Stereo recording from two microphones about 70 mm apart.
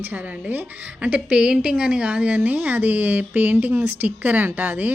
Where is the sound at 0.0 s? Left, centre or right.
Right.